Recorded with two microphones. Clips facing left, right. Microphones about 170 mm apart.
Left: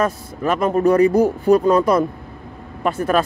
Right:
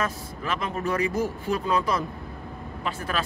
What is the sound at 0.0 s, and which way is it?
Speech, 45° left (ahead or behind).